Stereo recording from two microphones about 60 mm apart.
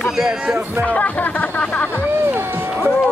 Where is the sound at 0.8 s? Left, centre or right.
Left.